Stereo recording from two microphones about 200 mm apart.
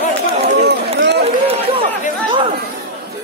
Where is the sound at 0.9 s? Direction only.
55° right (ahead or behind).